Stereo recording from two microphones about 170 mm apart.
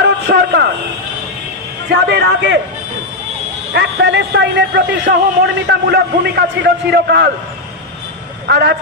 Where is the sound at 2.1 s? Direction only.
90° right.